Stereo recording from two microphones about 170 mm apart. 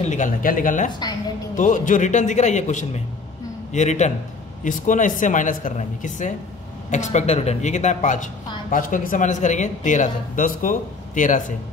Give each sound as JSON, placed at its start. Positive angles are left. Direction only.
{"t": 0.0, "sound": "a woman's voice", "side_deg": 45}